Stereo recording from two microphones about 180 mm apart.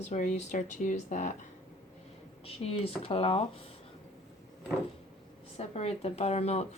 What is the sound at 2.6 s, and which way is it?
Speech, 35° left (ahead or behind).